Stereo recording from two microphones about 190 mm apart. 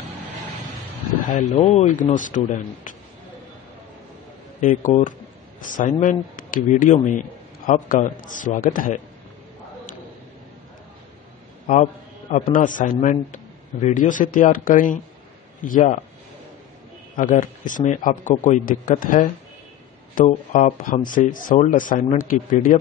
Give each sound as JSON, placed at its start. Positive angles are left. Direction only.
{"t": 1.3, "sound": "a man's voice", "side_deg": 40}
{"t": 4.6, "sound": "speech", "side_deg": 45}
{"t": 11.6, "sound": "a sound", "side_deg": 40}
{"t": 12.5, "sound": "speech", "side_deg": 45}
{"t": 17.2, "sound": "speech", "side_deg": 45}